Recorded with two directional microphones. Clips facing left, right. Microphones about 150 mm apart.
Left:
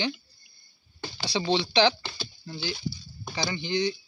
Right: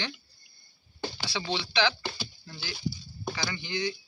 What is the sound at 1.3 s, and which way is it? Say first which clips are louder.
Speech: left 7 dB; 30° left (ahead or behind).